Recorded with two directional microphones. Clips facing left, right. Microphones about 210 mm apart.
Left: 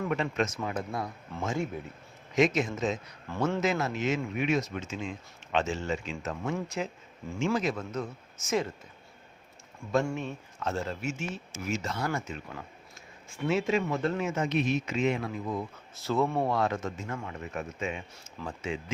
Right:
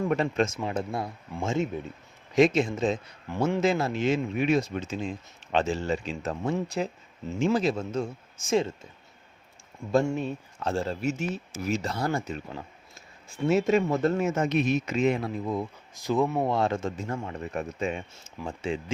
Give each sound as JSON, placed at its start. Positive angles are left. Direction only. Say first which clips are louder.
{"t": 0.0, "sound": "speech", "louder": "right 4 dB", "side_deg": -35}
{"t": 3.3, "sound": "speech", "louder": "right 3 dB", "side_deg": -15}
{"t": 3.6, "sound": "speech", "louder": "right 4 dB", "side_deg": -30}
{"t": 9.9, "sound": "speech", "louder": "right 4 dB", "side_deg": -30}
{"t": 13.5, "sound": "speech", "louder": "right 5 dB", "side_deg": -40}
{"t": 16.0, "sound": "speech", "louder": "right 2 dB", "side_deg": -15}